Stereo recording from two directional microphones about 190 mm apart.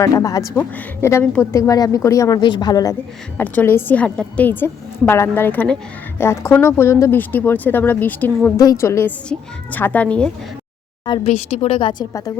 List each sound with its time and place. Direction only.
0.0 s speech: 20° left (ahead or behind)
3.3 s speech: 10° left (ahead or behind)
11.0 s speech: 25° left (ahead or behind)
11.3 s a woman's voice: 40° left (ahead or behind); by 12.3 s 20° left (ahead or behind)